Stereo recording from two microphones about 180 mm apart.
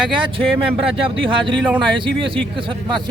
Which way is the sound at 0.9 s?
30° right (ahead or behind).